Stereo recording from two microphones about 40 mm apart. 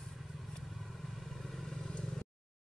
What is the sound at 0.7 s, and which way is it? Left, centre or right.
Vehicle, centre.